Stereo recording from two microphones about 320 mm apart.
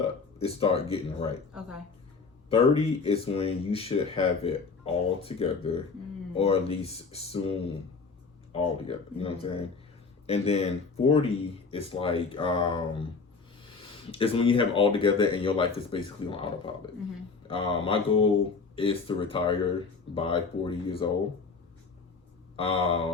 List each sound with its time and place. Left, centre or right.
0.3 s speech: centre
2.5 s speech: centre
8.5 s speech: centre
14.1 s speech: centre
22.5 s speech: centre